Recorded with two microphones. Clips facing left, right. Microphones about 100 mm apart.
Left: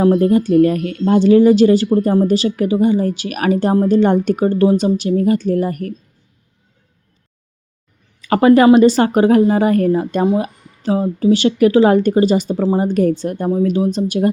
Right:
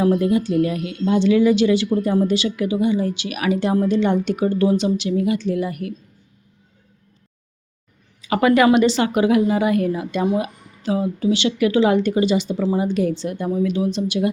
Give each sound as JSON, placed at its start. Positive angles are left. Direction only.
{"t": 0.0, "sound": "speech", "side_deg": 35}
{"t": 0.3, "sound": "speech", "side_deg": 50}
{"t": 8.4, "sound": "speech", "side_deg": 35}